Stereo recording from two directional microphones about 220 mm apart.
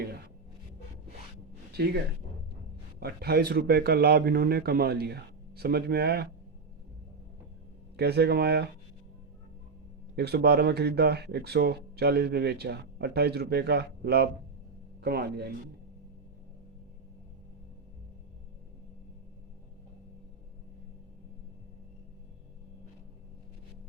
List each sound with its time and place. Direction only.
3.0 s speech: 45° right (ahead or behind)
7.9 s speech: 45° right (ahead or behind)
10.2 s speech: 45° right (ahead or behind)